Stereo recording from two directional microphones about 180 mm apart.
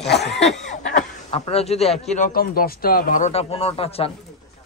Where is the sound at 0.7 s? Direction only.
45° left (ahead or behind).